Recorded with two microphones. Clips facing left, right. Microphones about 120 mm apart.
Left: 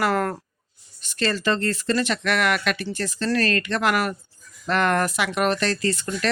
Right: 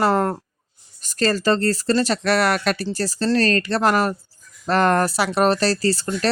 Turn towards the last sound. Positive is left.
turn(degrees=-35)  # may be behind; listen again after turning